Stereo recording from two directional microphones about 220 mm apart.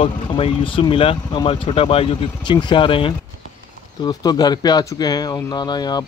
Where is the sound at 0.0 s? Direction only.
25° left (ahead or behind).